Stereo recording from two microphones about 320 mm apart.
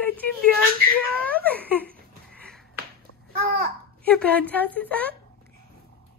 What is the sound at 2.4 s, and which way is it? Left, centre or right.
Finger snapping, centre.